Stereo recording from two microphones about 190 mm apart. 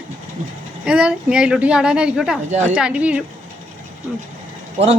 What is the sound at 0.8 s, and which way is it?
Speech, 5° right (ahead or behind).